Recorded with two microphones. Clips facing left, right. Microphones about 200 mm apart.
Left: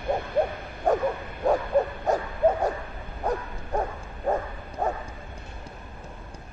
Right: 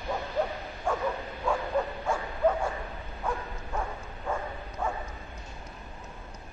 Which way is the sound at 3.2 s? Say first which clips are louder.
Left 5 dB; 40° left (ahead or behind).